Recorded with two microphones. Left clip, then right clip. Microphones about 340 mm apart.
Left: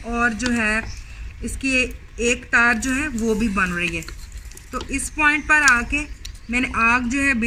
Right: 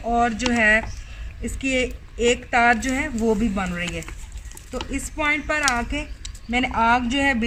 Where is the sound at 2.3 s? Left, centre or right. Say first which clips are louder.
Left 1 dB; centre.